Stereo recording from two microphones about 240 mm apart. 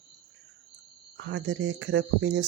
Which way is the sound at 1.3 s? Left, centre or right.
Right.